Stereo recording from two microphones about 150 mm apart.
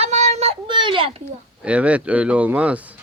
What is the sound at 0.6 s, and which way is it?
Speech, 35° right (ahead or behind).